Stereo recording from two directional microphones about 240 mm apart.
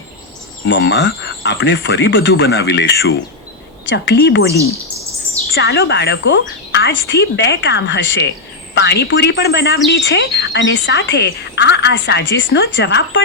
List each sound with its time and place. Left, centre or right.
0.6 s speech: left
5.5 s a woman's voice: left